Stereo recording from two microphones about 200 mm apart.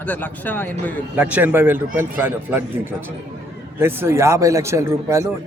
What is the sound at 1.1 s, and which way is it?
A man's voice, 10° right (ahead or behind).